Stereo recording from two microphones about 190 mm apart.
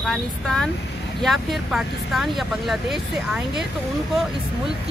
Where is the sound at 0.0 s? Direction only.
5° left (ahead or behind).